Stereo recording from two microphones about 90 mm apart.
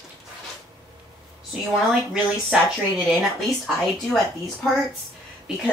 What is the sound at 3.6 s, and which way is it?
Speech, 5° left (ahead or behind).